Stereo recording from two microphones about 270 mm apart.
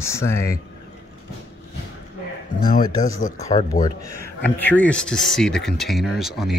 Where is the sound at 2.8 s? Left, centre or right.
Left.